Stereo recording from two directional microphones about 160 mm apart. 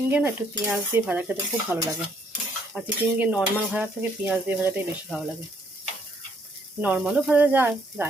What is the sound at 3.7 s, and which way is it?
Speech, 10° right (ahead or behind).